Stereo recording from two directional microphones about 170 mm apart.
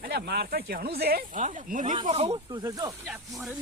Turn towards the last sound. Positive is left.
turn(degrees=0)  # may be behind; listen again after turning